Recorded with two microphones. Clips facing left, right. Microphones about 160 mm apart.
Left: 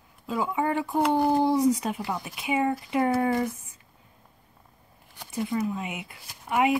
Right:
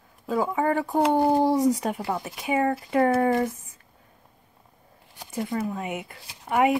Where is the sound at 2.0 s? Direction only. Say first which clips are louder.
Right 3 dB; 30° right (ahead or behind).